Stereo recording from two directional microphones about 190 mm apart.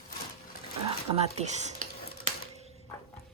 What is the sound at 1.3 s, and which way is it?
Speech, 35° right (ahead or behind).